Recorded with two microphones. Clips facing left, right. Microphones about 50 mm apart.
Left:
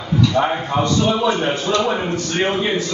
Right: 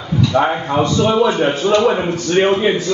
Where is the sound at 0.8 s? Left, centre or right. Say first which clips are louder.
Right 3 dB; right.